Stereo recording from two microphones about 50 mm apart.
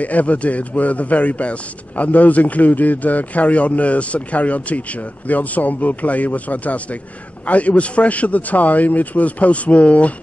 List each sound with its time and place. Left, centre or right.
0.0 s a man's voice: left